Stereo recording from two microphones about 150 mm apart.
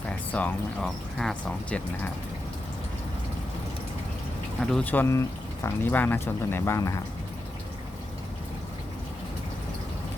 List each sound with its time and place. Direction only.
0.3 s speech: 5° left (ahead or behind)
4.6 s speech: 5° left (ahead or behind)